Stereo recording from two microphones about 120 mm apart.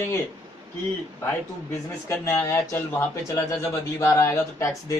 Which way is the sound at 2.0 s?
20° left (ahead or behind).